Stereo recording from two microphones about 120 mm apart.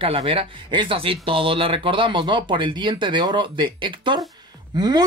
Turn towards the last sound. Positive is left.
turn(degrees=-35)  # may be behind; listen again after turning